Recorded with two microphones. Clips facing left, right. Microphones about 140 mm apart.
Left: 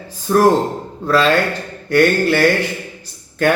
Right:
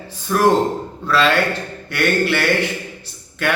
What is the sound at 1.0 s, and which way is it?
Speech, 40° left (ahead or behind).